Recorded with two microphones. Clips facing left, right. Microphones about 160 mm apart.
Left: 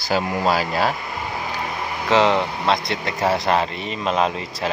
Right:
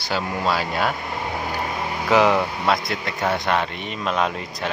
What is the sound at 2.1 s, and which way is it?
Speech, 20° left (ahead or behind).